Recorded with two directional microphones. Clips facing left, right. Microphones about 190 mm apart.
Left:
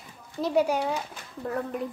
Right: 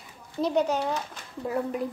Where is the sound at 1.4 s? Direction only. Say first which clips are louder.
Right 2 dB; 5° right (ahead or behind).